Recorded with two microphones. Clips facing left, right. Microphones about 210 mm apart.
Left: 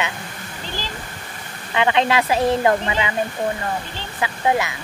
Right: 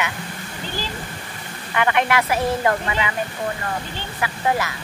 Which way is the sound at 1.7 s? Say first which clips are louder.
Left 2 dB; 20° left (ahead or behind).